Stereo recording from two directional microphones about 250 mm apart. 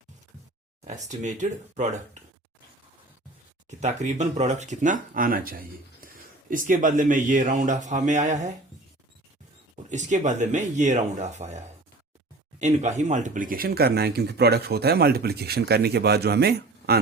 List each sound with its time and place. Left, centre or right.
0.9 s speech: right
3.7 s speech: right
10.1 s speech: right